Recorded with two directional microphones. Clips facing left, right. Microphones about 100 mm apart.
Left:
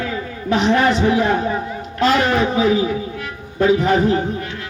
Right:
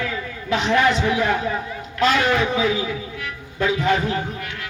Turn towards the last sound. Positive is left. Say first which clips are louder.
# left 5 dB
turn(degrees=30)  # may be behind; listen again after turning